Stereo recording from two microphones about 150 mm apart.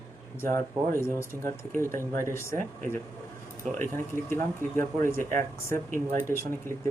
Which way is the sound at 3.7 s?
15° left (ahead or behind).